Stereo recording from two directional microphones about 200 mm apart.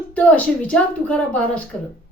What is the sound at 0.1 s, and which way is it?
A woman's voice, 5° left (ahead or behind).